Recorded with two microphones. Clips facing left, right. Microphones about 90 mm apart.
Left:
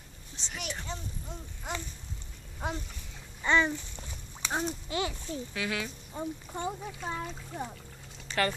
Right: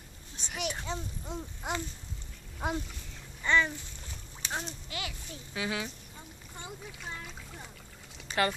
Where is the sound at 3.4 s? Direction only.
20° left (ahead or behind).